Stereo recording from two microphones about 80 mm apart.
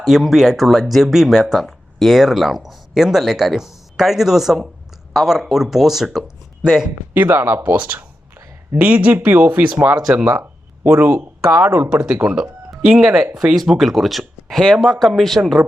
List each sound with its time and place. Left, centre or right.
0.0 s speech: centre
7.1 s speech: right
10.0 s speech: centre
10.4 s speech: right
11.9 s speech: centre